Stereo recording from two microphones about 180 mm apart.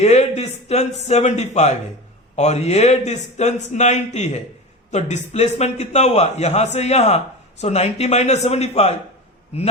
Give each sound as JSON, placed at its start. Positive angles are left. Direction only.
{"t": 0.0, "sound": "a man's voice", "side_deg": 35}